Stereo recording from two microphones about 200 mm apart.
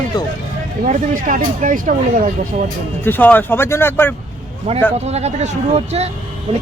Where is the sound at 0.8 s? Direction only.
40° right (ahead or behind).